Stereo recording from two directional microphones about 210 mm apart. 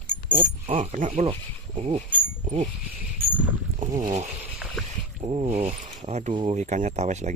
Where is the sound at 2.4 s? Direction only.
35° right (ahead or behind).